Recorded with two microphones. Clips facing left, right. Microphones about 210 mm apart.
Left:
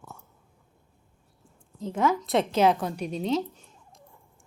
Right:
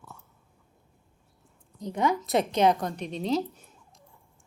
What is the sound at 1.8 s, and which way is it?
Speech, centre (ahead or behind).